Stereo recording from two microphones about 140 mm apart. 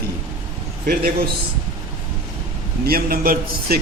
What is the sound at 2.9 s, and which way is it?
Speech, 90° right.